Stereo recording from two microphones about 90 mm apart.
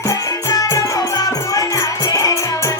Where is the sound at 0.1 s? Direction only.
40° left (ahead or behind).